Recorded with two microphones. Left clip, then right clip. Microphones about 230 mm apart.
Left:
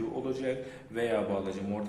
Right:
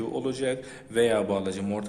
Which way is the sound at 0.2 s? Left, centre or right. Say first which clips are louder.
Right 5 dB; right.